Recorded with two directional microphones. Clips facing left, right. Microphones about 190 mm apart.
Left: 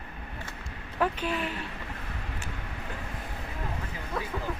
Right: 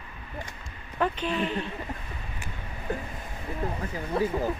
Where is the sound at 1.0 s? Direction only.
5° left (ahead or behind).